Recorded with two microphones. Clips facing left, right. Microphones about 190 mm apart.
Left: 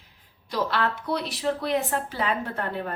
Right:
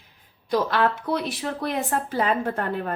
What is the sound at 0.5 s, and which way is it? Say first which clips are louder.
A woman's voice: right 4 dB; 50° right (ahead or behind).